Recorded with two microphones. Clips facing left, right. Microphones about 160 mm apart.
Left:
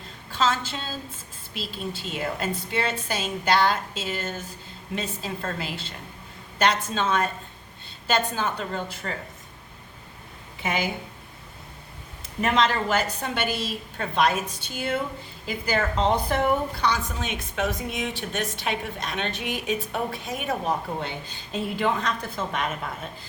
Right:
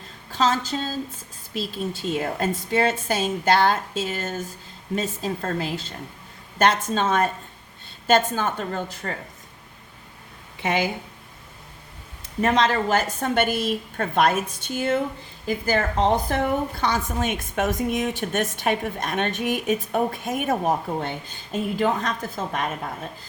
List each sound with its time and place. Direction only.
0.3 s a woman's voice: 45° right (ahead or behind)
12.4 s a woman's voice: 40° right (ahead or behind)